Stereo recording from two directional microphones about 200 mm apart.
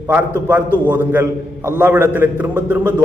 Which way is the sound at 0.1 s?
10° right (ahead or behind).